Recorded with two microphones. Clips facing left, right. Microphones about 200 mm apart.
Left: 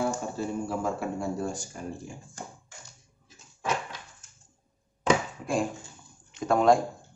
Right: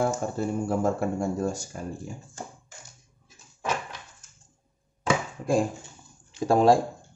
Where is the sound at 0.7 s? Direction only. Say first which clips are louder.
Right 5 dB; 45° right (ahead or behind).